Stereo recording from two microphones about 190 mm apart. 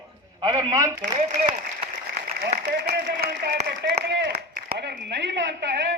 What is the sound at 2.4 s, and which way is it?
A man's voice, 50° right (ahead or behind).